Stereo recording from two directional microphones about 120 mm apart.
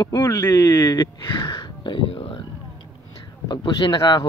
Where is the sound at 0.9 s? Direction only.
40° left (ahead or behind).